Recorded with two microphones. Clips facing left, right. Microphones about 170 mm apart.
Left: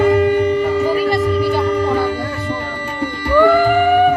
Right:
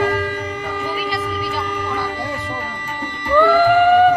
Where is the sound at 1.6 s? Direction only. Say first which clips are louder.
Left 9 dB; 30° left (ahead or behind).